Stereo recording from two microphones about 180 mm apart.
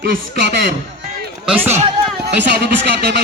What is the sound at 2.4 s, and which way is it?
Speech, 65° right (ahead or behind).